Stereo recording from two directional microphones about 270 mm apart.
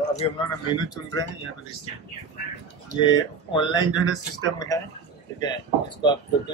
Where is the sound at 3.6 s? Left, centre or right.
Centre.